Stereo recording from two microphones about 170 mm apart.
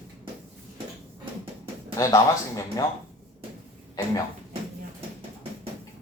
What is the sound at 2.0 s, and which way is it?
Speech, 20° left (ahead or behind).